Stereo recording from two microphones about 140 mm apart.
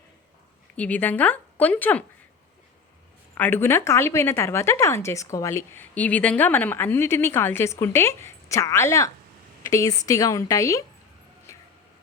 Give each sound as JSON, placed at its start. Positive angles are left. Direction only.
{"t": 0.8, "sound": "a woman's voice", "side_deg": 10}
{"t": 3.3, "sound": "a woman's voice", "side_deg": 15}